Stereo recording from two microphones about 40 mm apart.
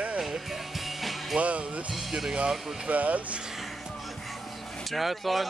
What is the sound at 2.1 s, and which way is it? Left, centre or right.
Speech, centre.